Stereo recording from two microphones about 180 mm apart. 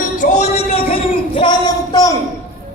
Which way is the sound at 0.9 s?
25° left (ahead or behind).